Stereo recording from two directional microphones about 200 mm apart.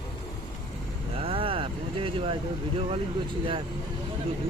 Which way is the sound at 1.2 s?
25° right (ahead or behind).